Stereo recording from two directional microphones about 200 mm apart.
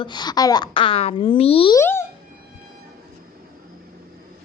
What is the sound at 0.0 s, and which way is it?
A child's voice, 20° left (ahead or behind).